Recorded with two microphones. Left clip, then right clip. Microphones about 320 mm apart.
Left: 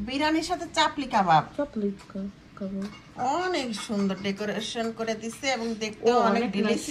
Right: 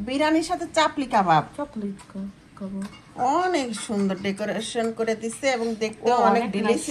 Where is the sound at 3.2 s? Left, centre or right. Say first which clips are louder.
Right 5 dB; centre.